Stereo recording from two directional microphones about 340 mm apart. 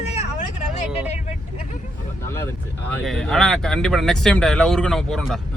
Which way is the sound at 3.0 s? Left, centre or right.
Centre.